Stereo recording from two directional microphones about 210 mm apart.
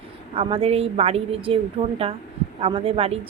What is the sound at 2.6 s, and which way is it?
Speech, 25° right (ahead or behind).